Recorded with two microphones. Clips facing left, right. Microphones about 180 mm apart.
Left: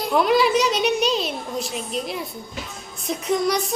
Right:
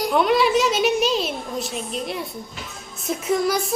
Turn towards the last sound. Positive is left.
turn(degrees=-5)  # may be behind; listen again after turning